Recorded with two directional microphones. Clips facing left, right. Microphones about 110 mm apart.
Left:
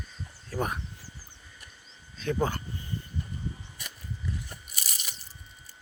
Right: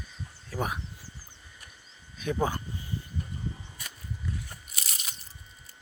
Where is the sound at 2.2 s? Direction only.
15° right (ahead or behind).